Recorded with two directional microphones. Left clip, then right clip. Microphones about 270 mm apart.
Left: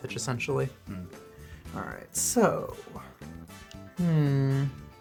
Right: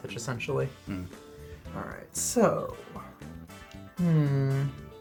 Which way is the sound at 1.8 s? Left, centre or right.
Left.